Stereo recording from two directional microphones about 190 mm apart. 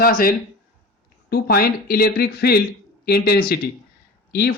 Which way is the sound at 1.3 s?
55° left (ahead or behind).